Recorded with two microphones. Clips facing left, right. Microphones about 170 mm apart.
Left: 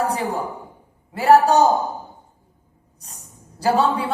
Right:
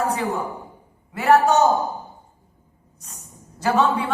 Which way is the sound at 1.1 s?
35° left (ahead or behind).